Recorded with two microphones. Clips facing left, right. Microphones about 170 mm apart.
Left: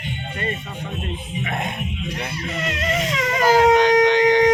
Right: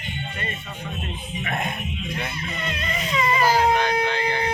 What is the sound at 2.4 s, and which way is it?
Music, 90° left.